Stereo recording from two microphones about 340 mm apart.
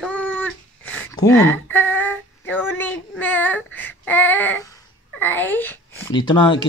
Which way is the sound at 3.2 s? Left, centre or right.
Centre.